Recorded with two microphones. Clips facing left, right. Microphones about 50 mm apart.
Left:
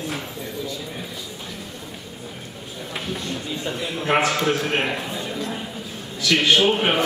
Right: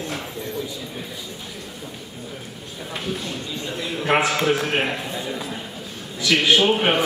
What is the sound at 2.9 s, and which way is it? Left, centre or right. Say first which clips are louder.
A woman's voice: even; centre.